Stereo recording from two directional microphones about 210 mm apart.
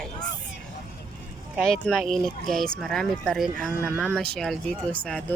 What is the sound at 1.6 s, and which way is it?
Speech, centre (ahead or behind).